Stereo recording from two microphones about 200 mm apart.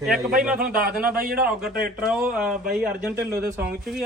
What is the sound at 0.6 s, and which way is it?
Speech, 45° right (ahead or behind).